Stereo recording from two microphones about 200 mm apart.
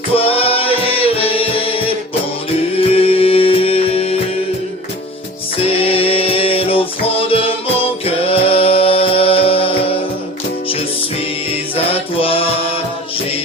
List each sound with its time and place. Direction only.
0.1 s music: 30° left (ahead or behind)
5.5 s music: 30° left (ahead or behind)
11.8 s music: 30° left (ahead or behind)